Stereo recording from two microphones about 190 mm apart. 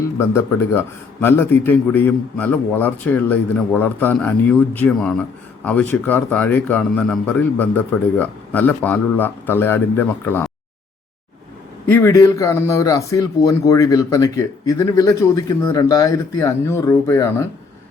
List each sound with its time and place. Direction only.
0.2 s speech: 10° left (ahead or behind)
11.9 s speech: 10° left (ahead or behind)